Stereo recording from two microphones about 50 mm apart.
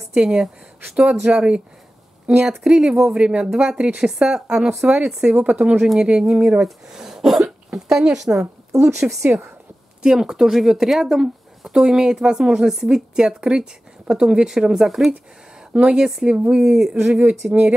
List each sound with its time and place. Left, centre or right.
0.1 s speech: centre
15.7 s speech: centre